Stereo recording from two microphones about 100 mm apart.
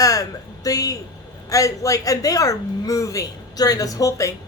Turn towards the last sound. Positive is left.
turn(degrees=35)  # may be behind; listen again after turning